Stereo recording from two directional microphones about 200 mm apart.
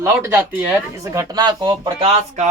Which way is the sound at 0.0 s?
10° right (ahead or behind).